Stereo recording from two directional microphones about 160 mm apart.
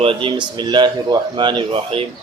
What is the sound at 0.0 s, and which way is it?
Speech, 35° right (ahead or behind).